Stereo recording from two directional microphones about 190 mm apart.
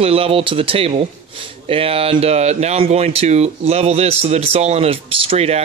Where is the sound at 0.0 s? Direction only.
30° right (ahead or behind).